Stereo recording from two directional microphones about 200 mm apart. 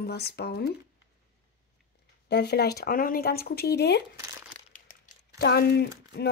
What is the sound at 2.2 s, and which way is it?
A woman's voice, 55° left (ahead or behind).